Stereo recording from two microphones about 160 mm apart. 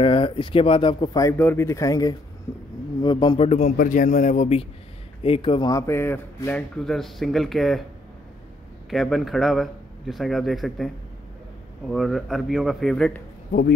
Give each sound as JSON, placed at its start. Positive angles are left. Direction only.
{"t": 0.0, "sound": "speech", "side_deg": 35}
{"t": 3.4, "sound": "a man's voice", "side_deg": 45}
{"t": 3.7, "sound": "a man's voice", "side_deg": 55}
{"t": 5.7, "sound": "speech", "side_deg": 20}
{"t": 8.9, "sound": "speech", "side_deg": 0}
{"t": 11.9, "sound": "speech", "side_deg": 0}
{"t": 13.5, "sound": "speech", "side_deg": 80}